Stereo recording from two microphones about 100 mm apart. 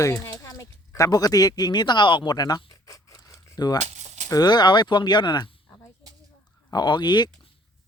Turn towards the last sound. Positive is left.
turn(degrees=45)  # may be behind; listen again after turning